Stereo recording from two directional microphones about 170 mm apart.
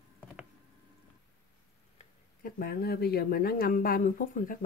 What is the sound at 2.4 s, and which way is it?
Speech, 60° left (ahead or behind).